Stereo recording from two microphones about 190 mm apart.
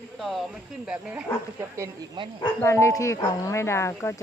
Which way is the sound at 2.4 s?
15° left (ahead or behind).